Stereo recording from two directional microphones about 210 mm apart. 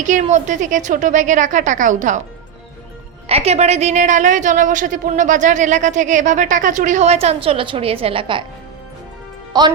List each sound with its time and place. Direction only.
0.0 s a woman's voice: 35° right (ahead or behind)
3.2 s a woman's voice: 30° right (ahead or behind)
9.5 s speech: 20° right (ahead or behind)